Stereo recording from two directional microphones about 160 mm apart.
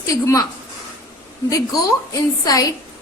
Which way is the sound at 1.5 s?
20° left (ahead or behind).